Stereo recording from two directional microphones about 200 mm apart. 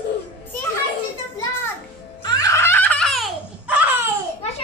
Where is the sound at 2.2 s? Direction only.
15° left (ahead or behind); by 4.0 s 10° right (ahead or behind).